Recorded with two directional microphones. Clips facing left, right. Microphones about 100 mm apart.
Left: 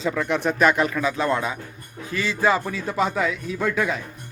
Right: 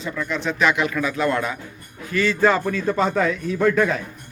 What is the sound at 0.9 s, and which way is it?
A man's voice, 25° left (ahead or behind).